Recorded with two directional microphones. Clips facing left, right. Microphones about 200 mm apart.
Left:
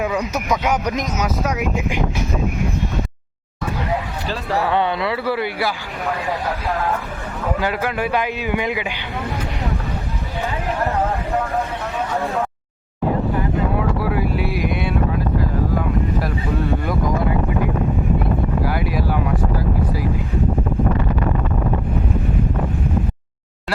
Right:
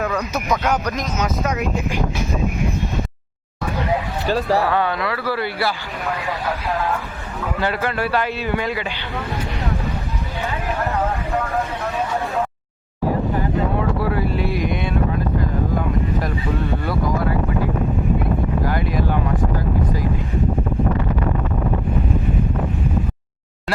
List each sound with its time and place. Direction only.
0.0 s a man's voice: 15° left (ahead or behind)
4.3 s speech: 40° right (ahead or behind)
4.6 s speech: 20° left (ahead or behind)
7.6 s a man's voice: 10° left (ahead or behind)
14.0 s wind noise: 10° left (ahead or behind)
16.8 s a man's voice: 15° left (ahead or behind)